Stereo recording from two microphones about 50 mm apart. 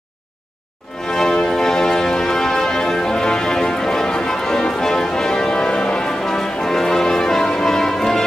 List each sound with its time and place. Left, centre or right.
1.1 s music: centre